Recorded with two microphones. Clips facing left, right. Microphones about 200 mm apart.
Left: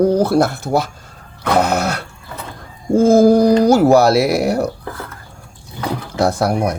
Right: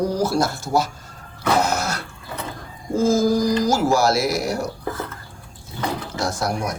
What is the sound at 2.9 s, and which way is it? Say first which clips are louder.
Speech: left 8 dB; 60° left (ahead or behind).